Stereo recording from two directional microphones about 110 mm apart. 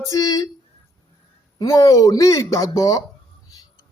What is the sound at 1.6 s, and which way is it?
Speech, 30° left (ahead or behind).